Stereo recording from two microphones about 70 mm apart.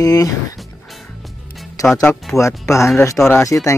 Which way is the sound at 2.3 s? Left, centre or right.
Left.